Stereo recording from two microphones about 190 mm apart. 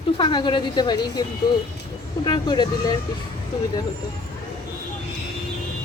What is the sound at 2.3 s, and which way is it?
Speech, 20° left (ahead or behind).